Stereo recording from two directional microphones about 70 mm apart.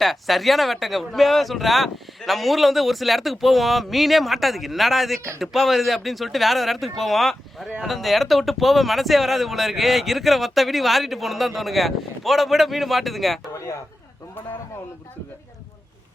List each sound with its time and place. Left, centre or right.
0.0 s speech: centre
13.5 s speech: left